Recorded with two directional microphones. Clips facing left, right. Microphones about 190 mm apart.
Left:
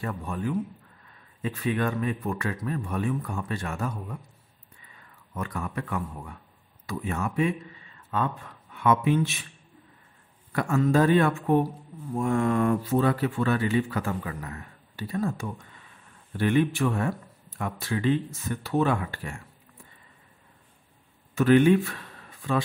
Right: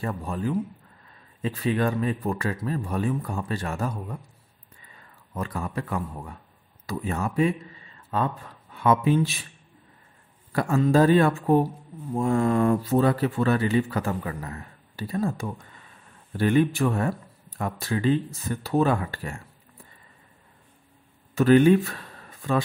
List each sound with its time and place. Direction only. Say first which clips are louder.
0.0 s speech: right 2 dB; 35° right (ahead or behind)
5.3 s speech: right 2 dB; 30° right (ahead or behind)
10.5 s speech: right 2 dB; 35° right (ahead or behind)
21.4 s speech: right 2 dB; 40° right (ahead or behind)